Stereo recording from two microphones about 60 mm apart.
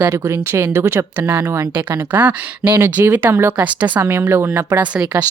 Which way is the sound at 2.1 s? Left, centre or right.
Right.